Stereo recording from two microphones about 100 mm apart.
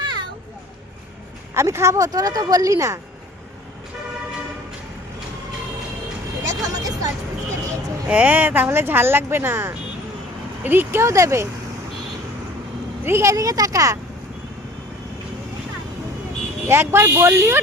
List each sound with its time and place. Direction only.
0.0 s children playing: 50° right (ahead or behind)
1.5 s speech: 30° right (ahead or behind)
6.4 s vehicle: 35° right (ahead or behind)
8.0 s speech: 15° right (ahead or behind); by 11.4 s 30° right (ahead or behind)
13.1 s speech: 25° right (ahead or behind)
13.3 s speech: 35° right (ahead or behind)
16.6 s speech: 25° right (ahead or behind)